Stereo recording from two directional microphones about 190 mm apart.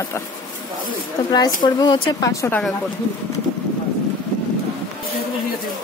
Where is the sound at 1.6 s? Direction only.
25° left (ahead or behind).